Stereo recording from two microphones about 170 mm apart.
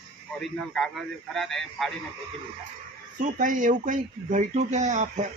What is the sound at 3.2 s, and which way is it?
Speech, 50° right (ahead or behind).